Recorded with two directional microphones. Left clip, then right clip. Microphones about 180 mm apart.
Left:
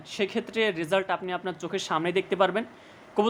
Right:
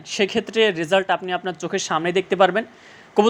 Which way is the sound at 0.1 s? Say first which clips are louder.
Right 8 dB; 20° right (ahead or behind).